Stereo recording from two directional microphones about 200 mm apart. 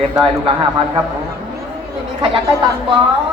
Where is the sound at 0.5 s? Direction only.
30° right (ahead or behind).